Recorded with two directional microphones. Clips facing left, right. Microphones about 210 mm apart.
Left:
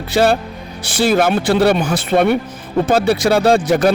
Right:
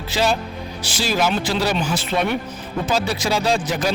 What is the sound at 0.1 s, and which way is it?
Speech, 55° left (ahead or behind).